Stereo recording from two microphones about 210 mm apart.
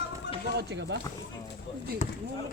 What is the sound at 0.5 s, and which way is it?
Speech, 55° right (ahead or behind).